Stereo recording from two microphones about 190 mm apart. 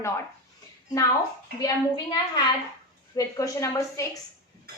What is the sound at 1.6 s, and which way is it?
A woman's voice, 20° left (ahead or behind).